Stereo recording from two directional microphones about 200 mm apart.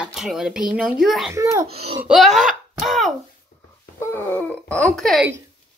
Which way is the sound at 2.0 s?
Centre (ahead or behind).